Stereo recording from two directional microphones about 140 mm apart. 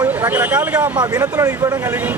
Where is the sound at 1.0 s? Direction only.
25° right (ahead or behind).